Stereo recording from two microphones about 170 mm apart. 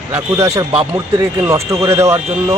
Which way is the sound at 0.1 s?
15° right (ahead or behind).